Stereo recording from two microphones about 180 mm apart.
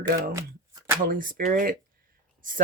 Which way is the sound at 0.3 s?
15° right (ahead or behind).